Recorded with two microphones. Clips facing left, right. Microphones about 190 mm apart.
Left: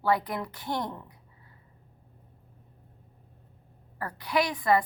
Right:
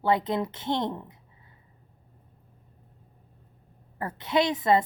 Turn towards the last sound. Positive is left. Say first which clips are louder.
# right 2 dB
turn(degrees=-25)  # may be behind; listen again after turning